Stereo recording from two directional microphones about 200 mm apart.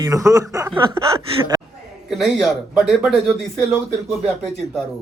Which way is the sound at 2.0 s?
Centre (ahead or behind).